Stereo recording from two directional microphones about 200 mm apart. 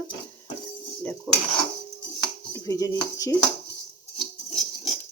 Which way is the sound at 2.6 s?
20° left (ahead or behind).